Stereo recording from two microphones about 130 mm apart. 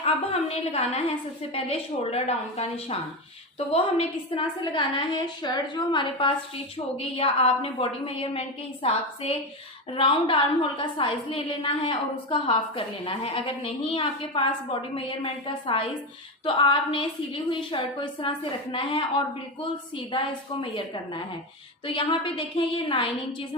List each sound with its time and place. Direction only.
0.0 s a woman's voice: 50° left (ahead or behind)